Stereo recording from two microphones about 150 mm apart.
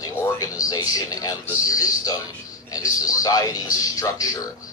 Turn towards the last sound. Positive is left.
turn(degrees=25)  # may be behind; listen again after turning